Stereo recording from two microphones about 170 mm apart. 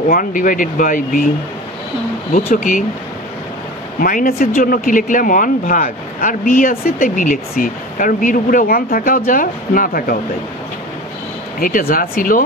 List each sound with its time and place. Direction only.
0.1 s speech: 55° left (ahead or behind)
2.3 s speech: 45° left (ahead or behind)
4.0 s speech: 55° left (ahead or behind)
11.6 s speech: 55° left (ahead or behind)